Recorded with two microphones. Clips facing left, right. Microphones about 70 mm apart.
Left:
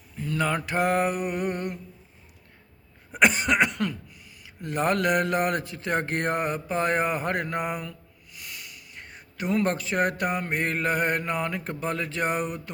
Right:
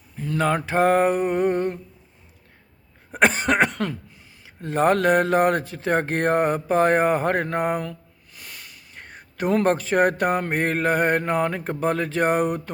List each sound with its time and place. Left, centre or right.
0.2 s speech: right
3.1 s speech: right